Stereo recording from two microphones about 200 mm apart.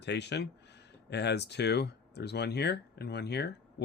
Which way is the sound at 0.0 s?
60° left (ahead or behind).